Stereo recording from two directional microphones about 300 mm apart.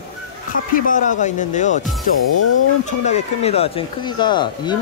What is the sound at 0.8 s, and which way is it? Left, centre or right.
Speech, left.